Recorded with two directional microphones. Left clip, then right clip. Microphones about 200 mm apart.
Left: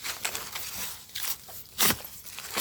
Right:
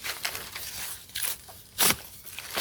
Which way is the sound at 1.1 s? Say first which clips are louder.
Right 2 dB; centre (ahead or behind).